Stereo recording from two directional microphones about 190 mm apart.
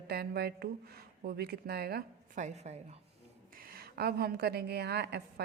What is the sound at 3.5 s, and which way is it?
A woman's voice, 50° right (ahead or behind).